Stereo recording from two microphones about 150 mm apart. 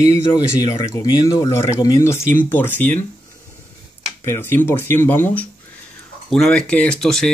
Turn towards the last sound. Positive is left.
turn(degrees=5)  # may be behind; listen again after turning